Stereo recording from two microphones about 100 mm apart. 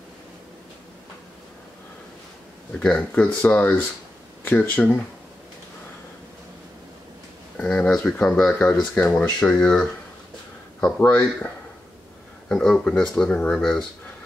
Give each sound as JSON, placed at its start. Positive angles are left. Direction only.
{"t": 2.8, "sound": "speech", "side_deg": 15}
{"t": 7.5, "sound": "speech", "side_deg": 10}